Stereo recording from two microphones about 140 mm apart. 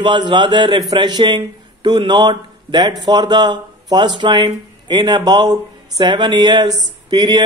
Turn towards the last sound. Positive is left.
turn(degrees=-35)  # may be behind; listen again after turning